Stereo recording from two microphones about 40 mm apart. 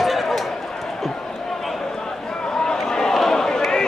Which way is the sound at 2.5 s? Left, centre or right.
Centre.